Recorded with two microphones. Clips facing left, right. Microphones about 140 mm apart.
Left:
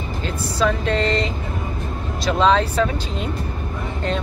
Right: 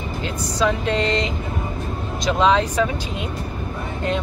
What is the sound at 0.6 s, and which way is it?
Speech, 15° right (ahead or behind).